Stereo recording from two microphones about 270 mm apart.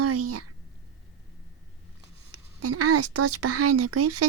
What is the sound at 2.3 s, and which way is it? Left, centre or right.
A woman's voice, right.